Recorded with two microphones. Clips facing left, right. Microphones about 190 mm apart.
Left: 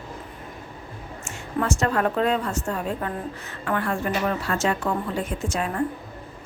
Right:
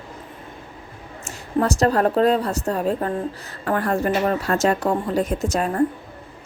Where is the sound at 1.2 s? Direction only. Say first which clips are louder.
Right 5 dB; 35° right (ahead or behind).